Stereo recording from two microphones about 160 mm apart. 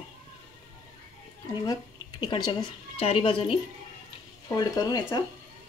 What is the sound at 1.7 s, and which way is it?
Speech, 30° left (ahead or behind).